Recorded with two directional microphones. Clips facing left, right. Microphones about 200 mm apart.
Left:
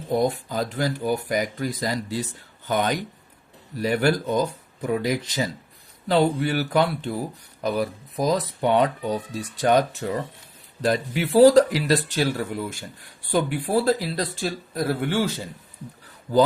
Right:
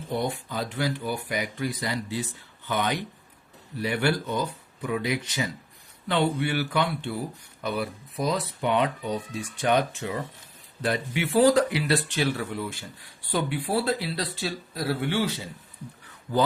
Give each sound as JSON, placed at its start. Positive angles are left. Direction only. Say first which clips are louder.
{"t": 0.1, "sound": "speech", "louder": "left 6 dB", "side_deg": 40}